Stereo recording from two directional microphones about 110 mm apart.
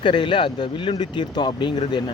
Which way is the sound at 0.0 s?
50° left (ahead or behind).